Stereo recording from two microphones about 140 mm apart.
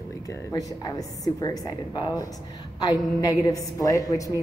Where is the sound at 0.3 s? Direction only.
25° left (ahead or behind).